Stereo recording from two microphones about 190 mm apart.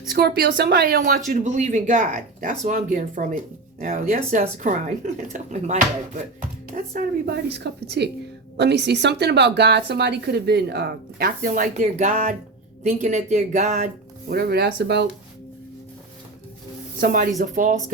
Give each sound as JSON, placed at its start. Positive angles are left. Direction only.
{"t": 0.1, "sound": "speech", "side_deg": -55}
{"t": 6.7, "sound": "speech", "side_deg": -55}
{"t": 14.3, "sound": "speech", "side_deg": -55}
{"t": 17.0, "sound": "speech", "side_deg": -50}